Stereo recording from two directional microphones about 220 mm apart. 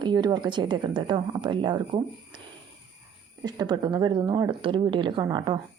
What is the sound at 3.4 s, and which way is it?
Speech, 20° right (ahead or behind).